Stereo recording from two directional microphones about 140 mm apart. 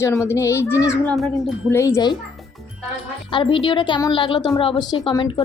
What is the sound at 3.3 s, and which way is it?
A woman's voice, 40° left (ahead or behind).